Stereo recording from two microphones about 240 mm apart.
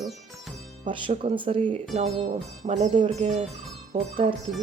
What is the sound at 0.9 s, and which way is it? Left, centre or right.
Speech, right.